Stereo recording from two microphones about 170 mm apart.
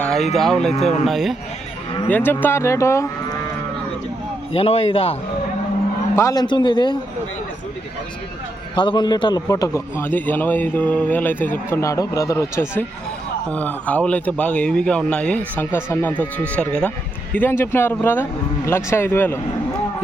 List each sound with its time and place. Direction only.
0.0 s a sound: centre (ahead or behind)
0.3 s speech: centre (ahead or behind)
2.0 s a man's voice: 10° left (ahead or behind)
4.5 s a man's voice: 35° left (ahead or behind)
6.1 s a man's voice: 20° left (ahead or behind)
8.7 s a man's voice: 25° left (ahead or behind)